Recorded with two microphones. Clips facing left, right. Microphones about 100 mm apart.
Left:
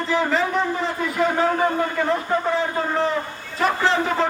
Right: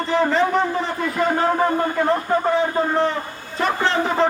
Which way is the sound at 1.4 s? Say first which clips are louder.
Right 2 dB; 35° right (ahead or behind).